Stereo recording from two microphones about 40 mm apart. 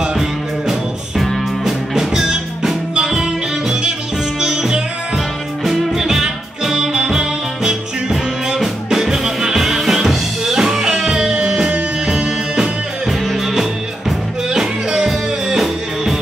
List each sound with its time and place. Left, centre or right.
0.2 s music: centre
5.6 s music: centre